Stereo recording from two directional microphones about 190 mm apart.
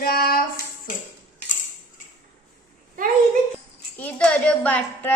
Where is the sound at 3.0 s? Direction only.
45° right (ahead or behind).